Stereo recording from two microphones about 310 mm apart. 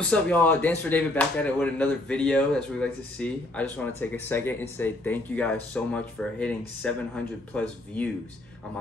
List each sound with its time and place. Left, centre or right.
0.0 s speech: centre